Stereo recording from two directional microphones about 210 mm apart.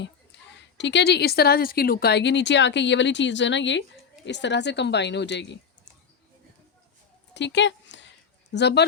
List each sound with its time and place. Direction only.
0.0 s a woman's voice: 55° left (ahead or behind)
7.3 s a woman's voice: 55° left (ahead or behind)